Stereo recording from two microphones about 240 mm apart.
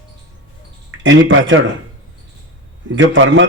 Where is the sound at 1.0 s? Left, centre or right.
Right.